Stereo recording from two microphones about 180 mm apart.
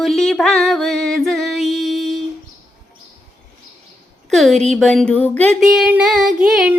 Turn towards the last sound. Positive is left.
turn(degrees=-5)  # may be behind; listen again after turning